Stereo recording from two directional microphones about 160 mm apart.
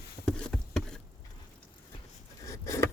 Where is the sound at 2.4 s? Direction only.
20° left (ahead or behind).